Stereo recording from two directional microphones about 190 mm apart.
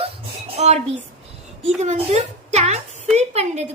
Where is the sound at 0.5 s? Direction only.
35° right (ahead or behind).